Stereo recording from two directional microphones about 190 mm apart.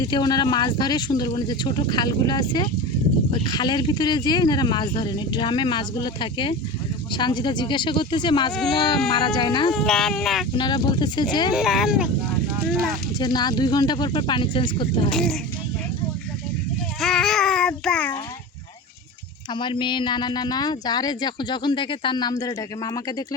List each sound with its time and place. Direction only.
0.0 s speech: 20° left (ahead or behind)
9.7 s speech: 5° left (ahead or behind)
10.6 s speech: 25° left (ahead or behind)
11.5 s speech: centre (ahead or behind)
13.1 s speech: 20° left (ahead or behind)
15.1 s speech: 5° left (ahead or behind)
17.0 s child singing: centre (ahead or behind)
19.5 s speech: 25° left (ahead or behind)